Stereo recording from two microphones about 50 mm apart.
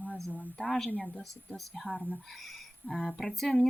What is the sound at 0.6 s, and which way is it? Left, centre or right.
Speech, centre.